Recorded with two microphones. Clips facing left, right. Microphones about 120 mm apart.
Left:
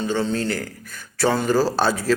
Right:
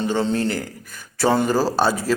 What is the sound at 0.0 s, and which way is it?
Speech, 25° right (ahead or behind).